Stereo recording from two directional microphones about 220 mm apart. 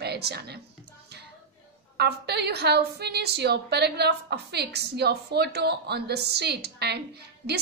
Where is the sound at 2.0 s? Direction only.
50° right (ahead or behind).